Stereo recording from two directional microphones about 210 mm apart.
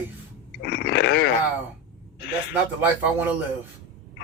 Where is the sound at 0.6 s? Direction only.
50° left (ahead or behind).